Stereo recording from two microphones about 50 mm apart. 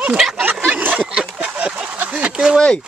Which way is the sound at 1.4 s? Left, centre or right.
Right.